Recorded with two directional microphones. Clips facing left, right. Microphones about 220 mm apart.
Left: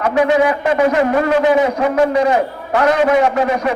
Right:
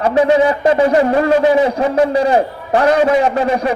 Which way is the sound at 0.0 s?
30° right (ahead or behind).